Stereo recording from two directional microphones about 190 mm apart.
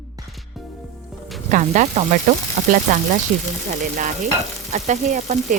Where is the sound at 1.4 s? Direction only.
40° right (ahead or behind).